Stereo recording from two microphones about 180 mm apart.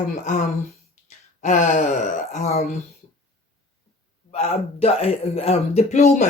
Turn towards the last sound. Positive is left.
turn(degrees=40)  # may be behind; listen again after turning